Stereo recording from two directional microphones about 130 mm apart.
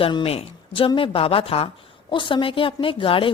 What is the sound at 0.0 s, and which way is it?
A woman's voice, 40° left (ahead or behind).